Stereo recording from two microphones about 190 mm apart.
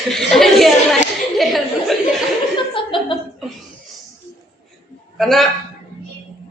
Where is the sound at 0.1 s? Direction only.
Centre (ahead or behind).